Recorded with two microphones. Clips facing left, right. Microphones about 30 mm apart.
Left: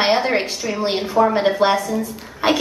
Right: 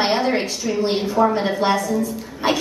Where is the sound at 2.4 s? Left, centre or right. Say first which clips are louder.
Left 2 dB; left.